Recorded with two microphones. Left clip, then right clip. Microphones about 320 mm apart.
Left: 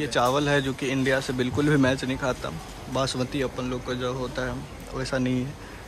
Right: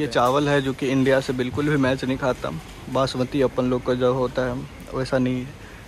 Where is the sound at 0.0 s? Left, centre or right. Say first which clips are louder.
Right 3 dB; centre.